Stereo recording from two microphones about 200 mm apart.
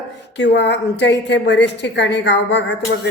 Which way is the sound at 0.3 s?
60° left (ahead or behind).